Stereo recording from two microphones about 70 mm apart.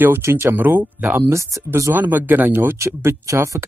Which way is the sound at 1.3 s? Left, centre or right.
Right.